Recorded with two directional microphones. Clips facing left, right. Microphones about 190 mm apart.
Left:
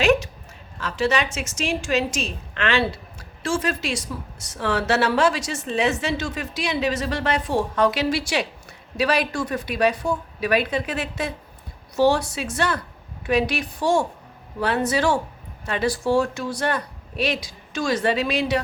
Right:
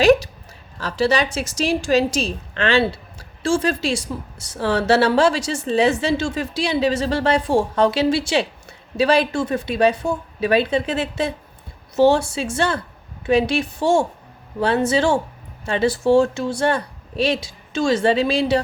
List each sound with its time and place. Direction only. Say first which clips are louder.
0.0 s a woman's voice: right 5 dB; 35° right (ahead or behind)